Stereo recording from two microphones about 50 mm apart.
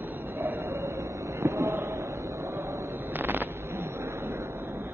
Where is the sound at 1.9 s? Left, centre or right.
Right.